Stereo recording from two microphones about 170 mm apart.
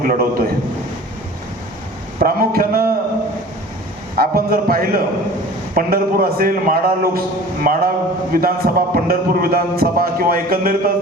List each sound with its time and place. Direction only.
0.0 s a man's voice: 55° right (ahead or behind)
2.1 s a man's voice: 60° right (ahead or behind)
4.1 s a man's voice: 60° right (ahead or behind)